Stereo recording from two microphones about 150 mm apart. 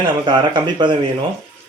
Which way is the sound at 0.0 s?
30° right (ahead or behind).